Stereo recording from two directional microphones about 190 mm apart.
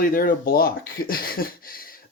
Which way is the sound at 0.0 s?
50° left (ahead or behind).